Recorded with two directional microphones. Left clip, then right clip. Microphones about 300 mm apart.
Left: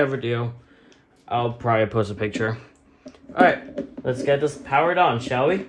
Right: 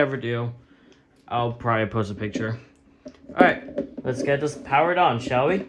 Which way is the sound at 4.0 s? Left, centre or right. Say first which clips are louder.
Left 3 dB; right.